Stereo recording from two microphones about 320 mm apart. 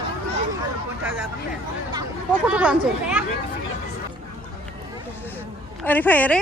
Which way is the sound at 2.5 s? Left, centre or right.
Centre.